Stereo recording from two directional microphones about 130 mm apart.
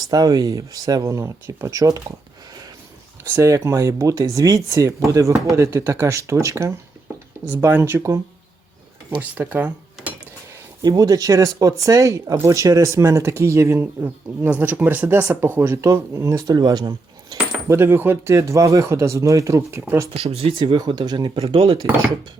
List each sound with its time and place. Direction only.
0.1 s speech: 30° right (ahead or behind)
3.3 s speech: 25° right (ahead or behind)
9.0 s speech: 10° right (ahead or behind)
10.8 s speech: 30° right (ahead or behind)
17.7 s speech: 15° right (ahead or behind)
20.1 s speech: 50° right (ahead or behind); by 21.3 s 35° right (ahead or behind)
21.3 s speech: 50° right (ahead or behind)